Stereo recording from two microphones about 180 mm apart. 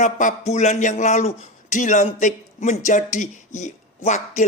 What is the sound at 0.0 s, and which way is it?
A man's voice, 45° left (ahead or behind).